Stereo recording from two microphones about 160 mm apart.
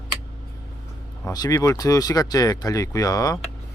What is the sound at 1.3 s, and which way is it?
Speech, 25° left (ahead or behind).